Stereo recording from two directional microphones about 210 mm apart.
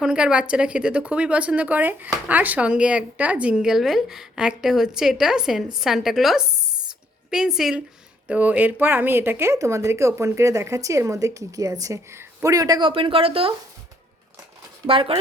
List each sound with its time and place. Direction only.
0.0 s a woman's voice: 5° right (ahead or behind); by 13.5 s 25° right (ahead or behind)
14.8 s speech: 25° right (ahead or behind)